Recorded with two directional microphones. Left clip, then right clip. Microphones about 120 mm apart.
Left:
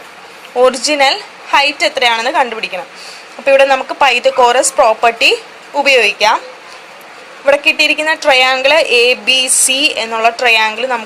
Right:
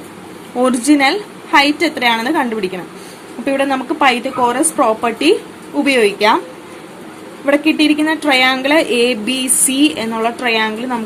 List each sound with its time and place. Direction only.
0.9 s a woman's voice: 15° left (ahead or behind)
7.4 s a woman's voice: 15° left (ahead or behind)